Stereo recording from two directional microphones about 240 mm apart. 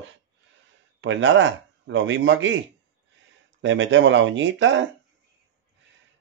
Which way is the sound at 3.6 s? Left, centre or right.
Right.